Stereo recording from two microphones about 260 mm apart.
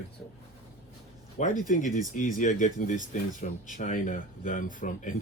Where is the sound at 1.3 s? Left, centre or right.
Left.